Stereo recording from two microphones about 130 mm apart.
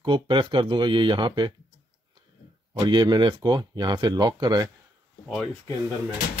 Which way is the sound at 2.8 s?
35° right (ahead or behind).